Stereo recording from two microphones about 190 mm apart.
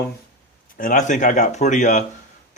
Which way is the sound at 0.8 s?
45° left (ahead or behind).